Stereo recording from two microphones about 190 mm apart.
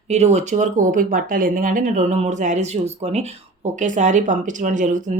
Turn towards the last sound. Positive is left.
turn(degrees=-40)  # may be behind; listen again after turning